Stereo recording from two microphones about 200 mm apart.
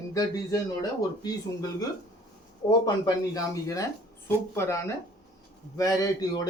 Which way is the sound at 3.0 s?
15° left (ahead or behind).